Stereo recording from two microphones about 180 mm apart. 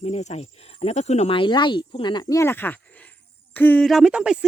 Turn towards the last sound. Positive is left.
turn(degrees=-5)  # may be behind; listen again after turning